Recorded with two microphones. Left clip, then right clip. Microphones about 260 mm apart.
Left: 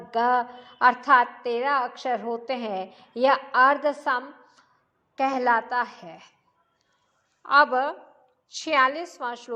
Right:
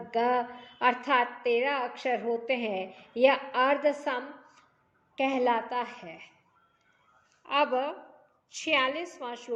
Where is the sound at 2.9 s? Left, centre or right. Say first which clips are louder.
Left 2 dB; centre.